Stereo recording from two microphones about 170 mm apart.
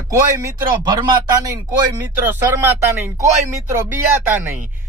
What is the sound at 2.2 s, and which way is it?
Speech, 15° right (ahead or behind).